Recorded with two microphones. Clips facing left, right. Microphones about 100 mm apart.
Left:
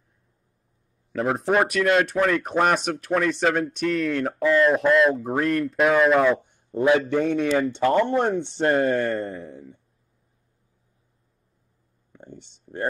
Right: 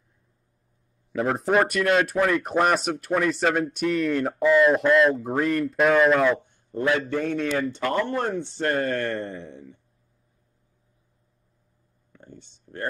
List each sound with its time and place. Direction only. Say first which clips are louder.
1.1 s speech: even; centre (ahead or behind); by 9.1 s 15° left (ahead or behind)
9.1 s speech: left 3 dB; centre (ahead or behind)
12.1 s a sound: left 3 dB; 20° left (ahead or behind)